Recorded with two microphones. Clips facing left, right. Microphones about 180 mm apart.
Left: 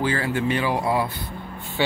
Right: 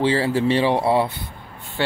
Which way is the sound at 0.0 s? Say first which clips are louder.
Right 4 dB; 30° right (ahead or behind).